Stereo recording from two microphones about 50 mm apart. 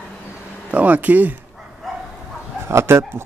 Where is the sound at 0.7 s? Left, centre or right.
Right.